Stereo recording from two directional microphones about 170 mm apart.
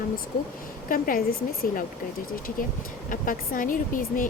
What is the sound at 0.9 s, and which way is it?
Speech, 55° left (ahead or behind).